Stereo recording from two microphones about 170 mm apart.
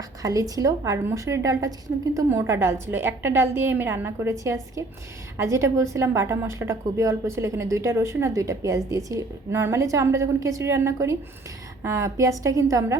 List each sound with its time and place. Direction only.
0.2 s a woman's voice: 20° right (ahead or behind)